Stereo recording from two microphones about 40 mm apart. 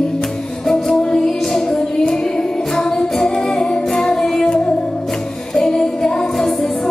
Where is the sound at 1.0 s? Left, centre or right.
Centre.